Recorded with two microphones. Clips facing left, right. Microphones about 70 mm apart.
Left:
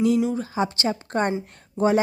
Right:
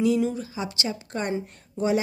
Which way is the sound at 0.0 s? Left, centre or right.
Left.